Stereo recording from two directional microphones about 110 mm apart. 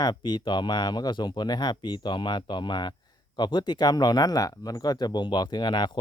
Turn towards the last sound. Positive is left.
turn(degrees=40)  # may be behind; listen again after turning